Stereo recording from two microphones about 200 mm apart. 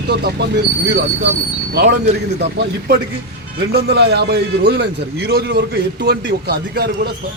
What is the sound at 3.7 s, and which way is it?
Speech, 55° right (ahead or behind).